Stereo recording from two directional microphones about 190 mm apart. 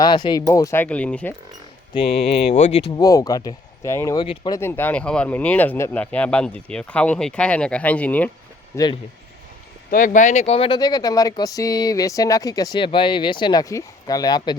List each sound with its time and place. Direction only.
0.0 s speech: 20° left (ahead or behind); by 1.4 s 5° left (ahead or behind)
1.9 s speech: 30° left (ahead or behind)
2.9 s speech: 20° left (ahead or behind)
8.7 s speech: 20° left (ahead or behind)
9.9 s speech: 45° left (ahead or behind); by 14.5 s 20° left (ahead or behind)